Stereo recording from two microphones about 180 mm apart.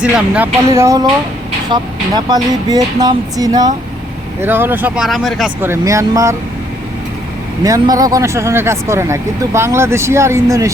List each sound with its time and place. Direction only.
0.0 s speech: 5° right (ahead or behind)
5.6 s speech: 15° right (ahead or behind)
7.6 s speech: 20° right (ahead or behind)